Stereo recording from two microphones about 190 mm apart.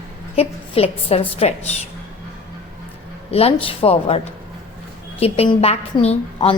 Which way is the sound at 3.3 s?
30° left (ahead or behind).